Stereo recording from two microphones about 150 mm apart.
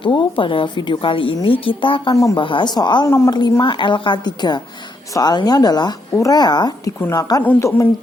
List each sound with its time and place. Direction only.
0.0 s a woman's voice: 35° left (ahead or behind)
2.1 s a woman's voice: 20° left (ahead or behind)
2.4 s a woman's voice: 30° left (ahead or behind)